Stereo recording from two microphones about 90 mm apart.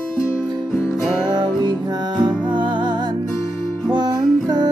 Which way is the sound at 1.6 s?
55° right (ahead or behind).